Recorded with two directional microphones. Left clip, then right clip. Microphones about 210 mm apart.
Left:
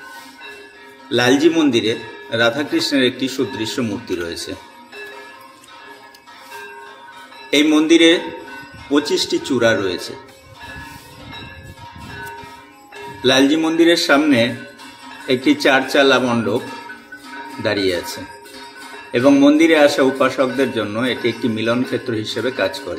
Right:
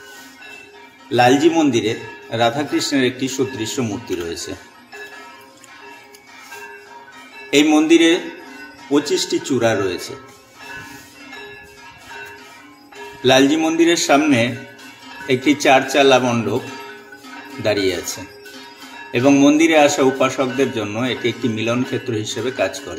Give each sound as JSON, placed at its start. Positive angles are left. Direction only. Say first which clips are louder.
{"t": 1.1, "sound": "a man's voice", "louder": "right 1 dB", "side_deg": 20}
{"t": 7.5, "sound": "a man's voice", "louder": "even", "side_deg": 20}
{"t": 13.2, "sound": "a man's voice", "louder": "right 1 dB", "side_deg": 20}
{"t": 17.6, "sound": "a man's voice", "louder": "even", "side_deg": 20}